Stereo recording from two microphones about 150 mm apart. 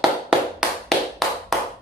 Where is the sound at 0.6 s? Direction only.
5° right (ahead or behind).